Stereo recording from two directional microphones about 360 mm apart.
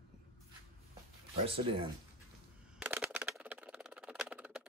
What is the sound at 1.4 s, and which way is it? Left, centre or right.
Speech, centre.